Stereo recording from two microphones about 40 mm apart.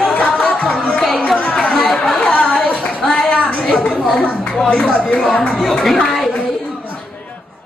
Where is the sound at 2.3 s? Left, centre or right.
Left.